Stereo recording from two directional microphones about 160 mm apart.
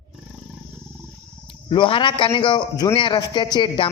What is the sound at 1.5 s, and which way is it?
Speech, 30° left (ahead or behind).